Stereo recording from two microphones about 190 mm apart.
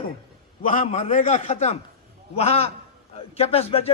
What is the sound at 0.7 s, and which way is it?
A man's voice, 35° left (ahead or behind).